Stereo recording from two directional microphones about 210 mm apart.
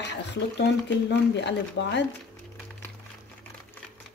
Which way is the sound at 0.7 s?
55° left (ahead or behind).